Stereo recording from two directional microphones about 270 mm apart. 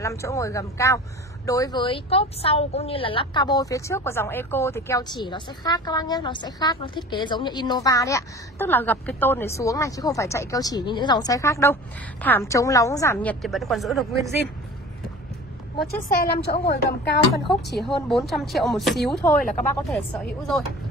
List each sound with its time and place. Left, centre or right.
0.0 s speech: centre
16.2 s speech: left
17.7 s speech: centre